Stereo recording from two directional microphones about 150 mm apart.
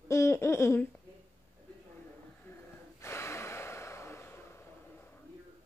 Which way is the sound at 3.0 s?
20° left (ahead or behind).